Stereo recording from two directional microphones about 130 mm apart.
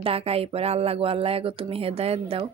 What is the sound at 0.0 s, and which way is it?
Speech, 50° right (ahead or behind).